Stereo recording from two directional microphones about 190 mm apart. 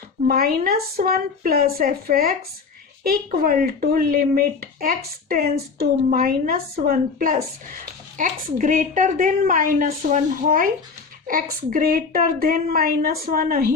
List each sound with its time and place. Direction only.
0.3 s speech: 50° right (ahead or behind)